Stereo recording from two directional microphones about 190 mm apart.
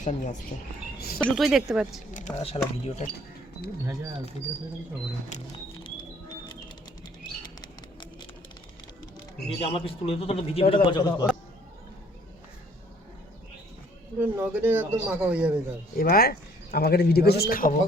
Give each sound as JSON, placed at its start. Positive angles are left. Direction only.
{"t": 0.0, "sound": "a man's voice", "side_deg": 40}
{"t": 0.9, "sound": "a sound", "side_deg": 55}
{"t": 1.2, "sound": "speech", "side_deg": 0}
{"t": 2.1, "sound": "a man's voice", "side_deg": 35}
{"t": 5.8, "sound": "music", "side_deg": 20}
{"t": 9.5, "sound": "a man's voice", "side_deg": 30}
{"t": 14.2, "sound": "speech", "side_deg": -10}
{"t": 16.0, "sound": "a man's voice", "side_deg": 50}